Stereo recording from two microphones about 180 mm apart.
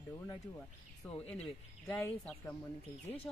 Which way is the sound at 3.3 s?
10° left (ahead or behind).